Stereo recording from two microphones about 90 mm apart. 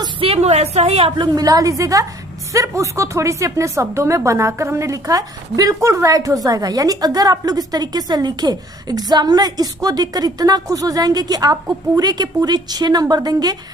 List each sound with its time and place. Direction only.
0.2 s a sound: 90° right
0.9 s a woman's voice: 90° right
1.4 s a woman's voice: 45° right (ahead or behind)